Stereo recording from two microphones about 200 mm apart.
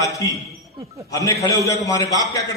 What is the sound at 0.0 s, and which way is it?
Speech, 15° left (ahead or behind).